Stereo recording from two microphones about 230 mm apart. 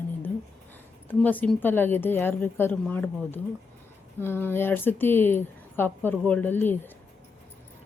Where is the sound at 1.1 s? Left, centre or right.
Centre.